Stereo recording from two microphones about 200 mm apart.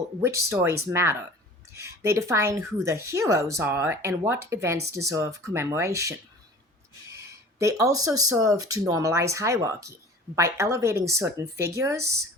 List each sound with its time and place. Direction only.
0.2 s speech: 15° right (ahead or behind)